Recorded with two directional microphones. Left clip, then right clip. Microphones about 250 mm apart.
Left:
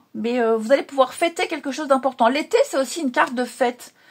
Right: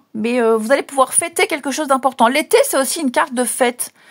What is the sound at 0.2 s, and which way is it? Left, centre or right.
Speech, right.